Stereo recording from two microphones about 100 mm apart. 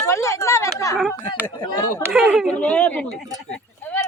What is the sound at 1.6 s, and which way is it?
Speech, 40° left (ahead or behind).